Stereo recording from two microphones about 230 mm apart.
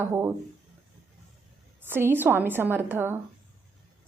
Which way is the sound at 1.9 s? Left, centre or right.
Centre.